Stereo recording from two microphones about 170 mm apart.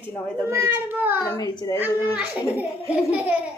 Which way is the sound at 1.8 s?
10° right (ahead or behind).